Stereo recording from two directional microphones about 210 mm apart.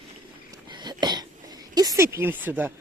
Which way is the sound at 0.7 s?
20° right (ahead or behind).